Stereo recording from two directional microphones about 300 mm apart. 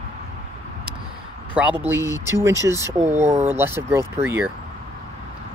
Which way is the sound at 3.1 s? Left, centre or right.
Right.